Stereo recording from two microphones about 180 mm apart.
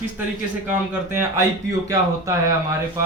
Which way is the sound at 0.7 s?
15° right (ahead or behind).